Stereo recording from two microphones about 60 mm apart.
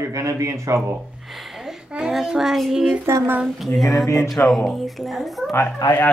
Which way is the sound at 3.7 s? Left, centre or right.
Left.